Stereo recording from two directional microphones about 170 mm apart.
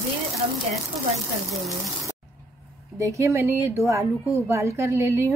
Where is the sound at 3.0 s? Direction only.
15° right (ahead or behind).